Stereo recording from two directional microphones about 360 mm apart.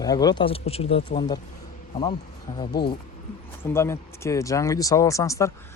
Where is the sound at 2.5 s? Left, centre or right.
Left.